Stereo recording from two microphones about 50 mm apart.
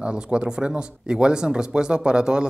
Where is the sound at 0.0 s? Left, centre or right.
Centre.